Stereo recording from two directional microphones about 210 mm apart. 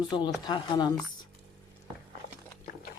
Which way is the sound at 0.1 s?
25° left (ahead or behind).